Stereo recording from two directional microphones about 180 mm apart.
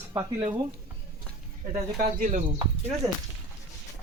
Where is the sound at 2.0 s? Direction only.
45° right (ahead or behind).